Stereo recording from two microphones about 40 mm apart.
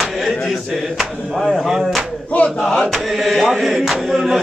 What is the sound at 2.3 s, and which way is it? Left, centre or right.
Speech, left.